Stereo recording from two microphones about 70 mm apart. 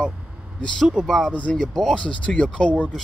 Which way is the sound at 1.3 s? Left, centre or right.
Centre.